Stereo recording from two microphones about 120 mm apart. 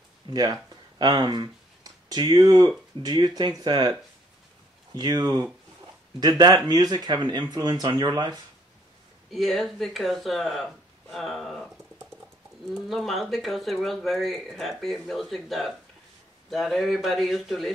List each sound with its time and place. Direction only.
0.3 s speech: 35° right (ahead or behind)
4.9 s speech: 35° right (ahead or behind)
9.3 s speech: centre (ahead or behind)
12.8 s speech: centre (ahead or behind)